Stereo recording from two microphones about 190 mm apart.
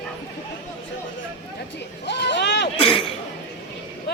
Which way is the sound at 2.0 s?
65° left (ahead or behind).